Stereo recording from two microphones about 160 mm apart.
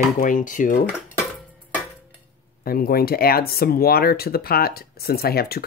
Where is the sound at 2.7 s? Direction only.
70° left (ahead or behind).